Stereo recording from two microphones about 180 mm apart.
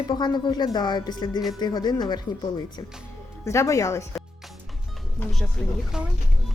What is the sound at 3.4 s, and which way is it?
Speech, 15° left (ahead or behind).